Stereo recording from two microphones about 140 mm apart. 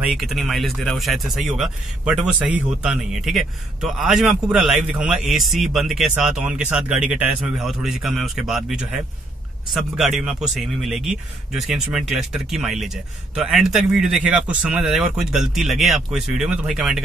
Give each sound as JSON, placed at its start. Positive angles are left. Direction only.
{"t": 0.1, "sound": "speech", "side_deg": 0}